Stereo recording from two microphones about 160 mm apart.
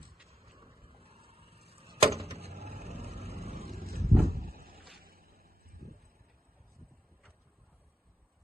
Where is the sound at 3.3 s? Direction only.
75° left (ahead or behind).